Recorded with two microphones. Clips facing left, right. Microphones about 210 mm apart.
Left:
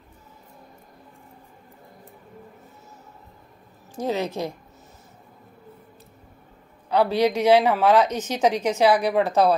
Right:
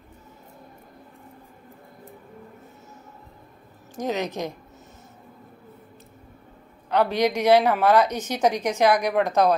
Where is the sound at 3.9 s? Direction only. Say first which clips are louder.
Left 1 dB; 15° right (ahead or behind).